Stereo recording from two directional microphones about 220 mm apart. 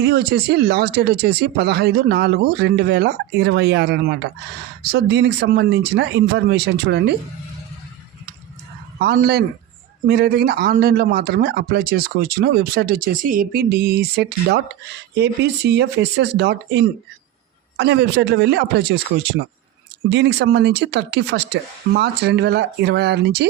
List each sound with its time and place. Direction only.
0.0 s speech: 45° right (ahead or behind)
9.0 s speech: 45° right (ahead or behind)